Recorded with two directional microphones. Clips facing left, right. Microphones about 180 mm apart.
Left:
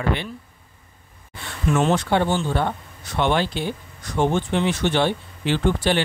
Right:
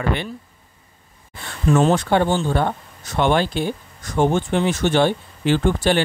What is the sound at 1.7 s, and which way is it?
Speech, 40° right (ahead or behind).